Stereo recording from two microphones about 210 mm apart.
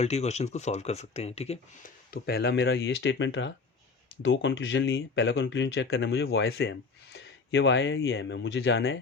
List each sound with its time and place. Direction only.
0.0 s speech: 30° left (ahead or behind)
2.0 s speech: 45° left (ahead or behind)